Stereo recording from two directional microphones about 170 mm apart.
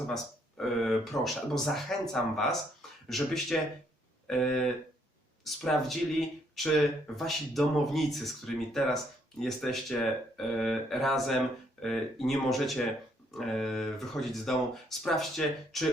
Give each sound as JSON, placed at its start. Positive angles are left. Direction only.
{"t": 0.1, "sound": "speech", "side_deg": 0}